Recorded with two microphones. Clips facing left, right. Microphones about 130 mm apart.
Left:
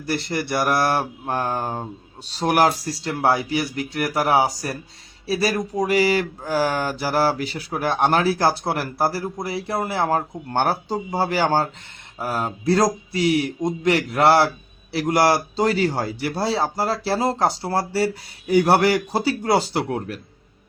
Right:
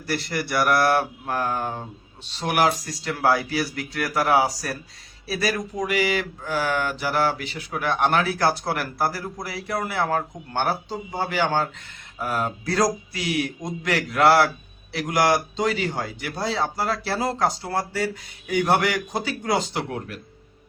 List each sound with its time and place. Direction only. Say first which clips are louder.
0.0 s a man's voice: left 2 dB; 25° left (ahead or behind)
10.5 s a man's voice: left 4 dB; 45° left (ahead or behind)